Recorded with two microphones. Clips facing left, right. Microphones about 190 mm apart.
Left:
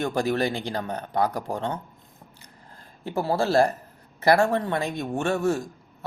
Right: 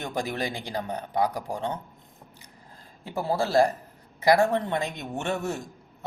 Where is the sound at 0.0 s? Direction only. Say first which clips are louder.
Left 6 dB; 15° right (ahead or behind).